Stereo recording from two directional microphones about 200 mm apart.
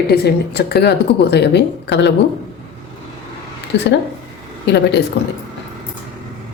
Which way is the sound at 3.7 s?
60° left (ahead or behind).